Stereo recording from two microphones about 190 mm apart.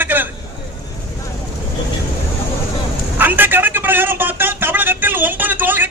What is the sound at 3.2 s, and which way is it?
Vehicle, 10° right (ahead or behind).